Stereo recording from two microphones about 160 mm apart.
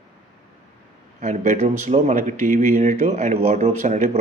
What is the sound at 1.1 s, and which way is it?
A man's voice, 50° right (ahead or behind).